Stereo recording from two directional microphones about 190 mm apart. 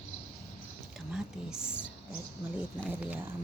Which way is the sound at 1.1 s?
5° right (ahead or behind).